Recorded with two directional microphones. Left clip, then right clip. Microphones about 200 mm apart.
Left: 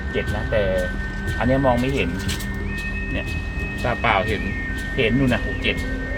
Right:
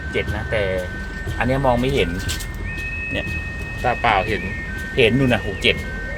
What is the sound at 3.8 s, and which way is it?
Speech, 10° right (ahead or behind).